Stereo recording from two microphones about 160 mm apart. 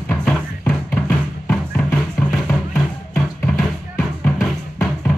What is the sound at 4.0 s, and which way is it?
Drum, 20° left (ahead or behind).